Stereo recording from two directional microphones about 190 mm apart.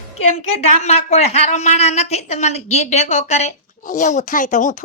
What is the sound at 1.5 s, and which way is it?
A woman's voice, 40° left (ahead or behind).